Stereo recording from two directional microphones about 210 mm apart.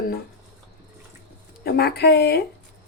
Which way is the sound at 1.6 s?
50° left (ahead or behind).